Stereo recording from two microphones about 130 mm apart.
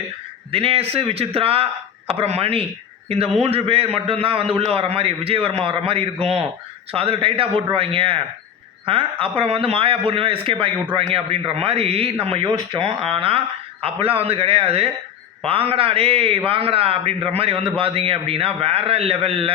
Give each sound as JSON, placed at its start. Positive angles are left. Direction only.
{"t": 0.5, "sound": "speech", "side_deg": -45}